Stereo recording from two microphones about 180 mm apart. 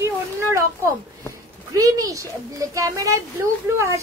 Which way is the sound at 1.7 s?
20° right (ahead or behind).